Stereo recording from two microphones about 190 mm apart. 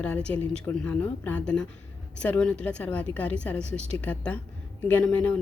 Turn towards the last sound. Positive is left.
turn(degrees=5)  # may be behind; listen again after turning